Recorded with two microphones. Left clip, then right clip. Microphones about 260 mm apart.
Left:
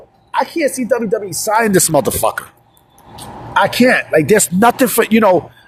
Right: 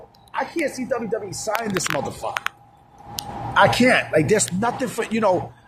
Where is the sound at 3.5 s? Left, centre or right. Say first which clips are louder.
Left 4 dB; left.